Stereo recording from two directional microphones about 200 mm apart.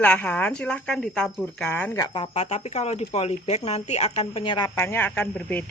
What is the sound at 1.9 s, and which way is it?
Speech, 20° left (ahead or behind).